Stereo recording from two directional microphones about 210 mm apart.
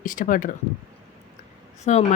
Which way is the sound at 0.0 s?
40° left (ahead or behind).